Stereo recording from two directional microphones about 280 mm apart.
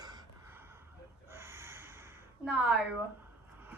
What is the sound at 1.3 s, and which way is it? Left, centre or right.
Snort, centre.